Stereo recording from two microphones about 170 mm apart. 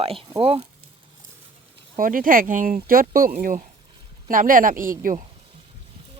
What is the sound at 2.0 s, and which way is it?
A woman's voice, 55° right (ahead or behind).